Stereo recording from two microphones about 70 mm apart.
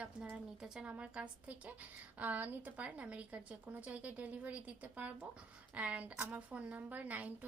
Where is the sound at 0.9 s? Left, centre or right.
Right.